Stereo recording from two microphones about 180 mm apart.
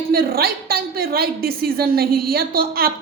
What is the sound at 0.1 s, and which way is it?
A woman's voice, 55° right (ahead or behind).